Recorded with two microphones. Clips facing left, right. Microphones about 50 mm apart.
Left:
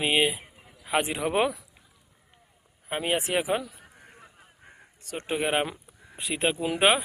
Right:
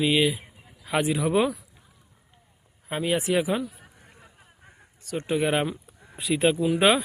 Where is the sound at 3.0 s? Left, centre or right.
Left.